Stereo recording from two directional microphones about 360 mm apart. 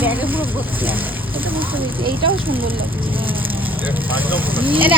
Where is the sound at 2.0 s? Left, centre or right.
Centre.